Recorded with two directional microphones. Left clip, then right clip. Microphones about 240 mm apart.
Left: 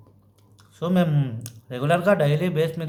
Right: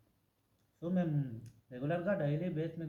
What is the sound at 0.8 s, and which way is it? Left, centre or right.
Speech, left.